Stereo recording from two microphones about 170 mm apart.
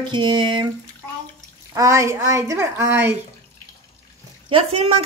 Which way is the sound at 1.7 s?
20° right (ahead or behind).